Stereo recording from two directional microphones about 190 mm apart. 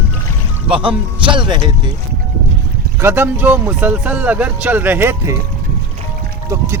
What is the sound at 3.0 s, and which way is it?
Speech, 10° right (ahead or behind).